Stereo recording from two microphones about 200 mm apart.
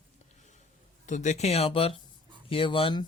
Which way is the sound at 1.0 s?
35° left (ahead or behind).